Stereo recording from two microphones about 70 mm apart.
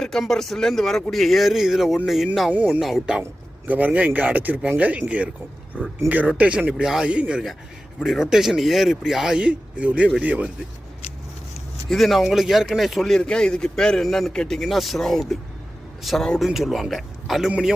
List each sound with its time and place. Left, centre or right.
0.0 s a man's voice: centre
2.5 s speech: right
2.8 s speech: centre
3.7 s speech: right
5.7 s speech: centre
6.1 s speech: right
7.9 s a man's voice: centre
11.9 s a man's voice: centre
13.1 s a man's voice: centre